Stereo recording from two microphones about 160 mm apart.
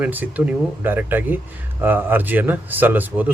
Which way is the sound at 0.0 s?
10° right (ahead or behind).